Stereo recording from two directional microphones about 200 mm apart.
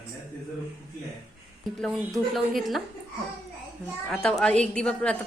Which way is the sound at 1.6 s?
Centre (ahead or behind).